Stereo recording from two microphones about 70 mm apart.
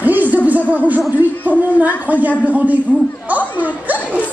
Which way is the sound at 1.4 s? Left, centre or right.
Right.